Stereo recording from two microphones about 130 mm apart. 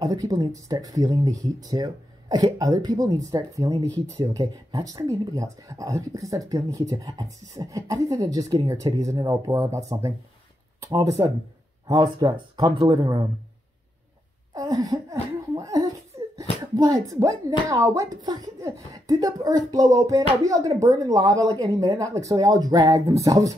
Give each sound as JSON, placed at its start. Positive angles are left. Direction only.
{"t": 0.0, "sound": "speech", "side_deg": -30}
{"t": 14.5, "sound": "a sound", "side_deg": -25}
{"t": 16.7, "sound": "speech", "side_deg": -30}